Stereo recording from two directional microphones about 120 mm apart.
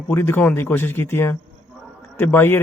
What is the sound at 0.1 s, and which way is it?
Speech, 20° left (ahead or behind).